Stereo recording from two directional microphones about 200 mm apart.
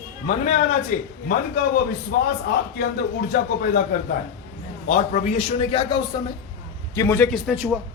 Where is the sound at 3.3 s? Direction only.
50° left (ahead or behind).